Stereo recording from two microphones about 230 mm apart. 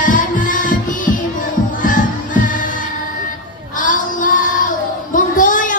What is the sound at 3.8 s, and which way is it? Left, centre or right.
Child singing, left.